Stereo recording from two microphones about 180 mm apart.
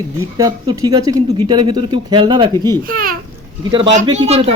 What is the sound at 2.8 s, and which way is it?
Speech, 55° right (ahead or behind).